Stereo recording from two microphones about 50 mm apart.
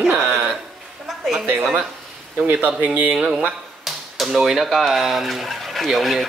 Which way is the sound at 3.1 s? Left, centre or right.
Centre.